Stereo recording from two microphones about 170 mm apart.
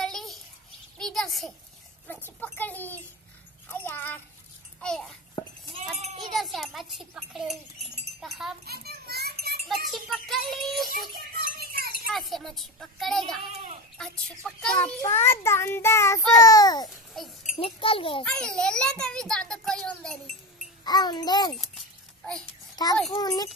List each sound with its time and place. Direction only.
0.0 s a sound: centre (ahead or behind)
2.4 s child singing: 10° left (ahead or behind)
4.7 s a child's voice: 5° left (ahead or behind)
6.3 s a child's voice: centre (ahead or behind)
8.6 s children playing: 65° right (ahead or behind)
9.8 s a child's voice: centre (ahead or behind)
11.1 s a sound: 60° right (ahead or behind)
12.1 s a child's voice: centre (ahead or behind)
15.0 s child singing: 15° left (ahead or behind)
17.1 s a child's voice: centre (ahead or behind)
17.6 s a child's voice: 30° left (ahead or behind)
18.2 s a child's voice: 5° left (ahead or behind)
20.8 s a child's voice: 25° left (ahead or behind)
22.8 s a child's voice: 25° left (ahead or behind)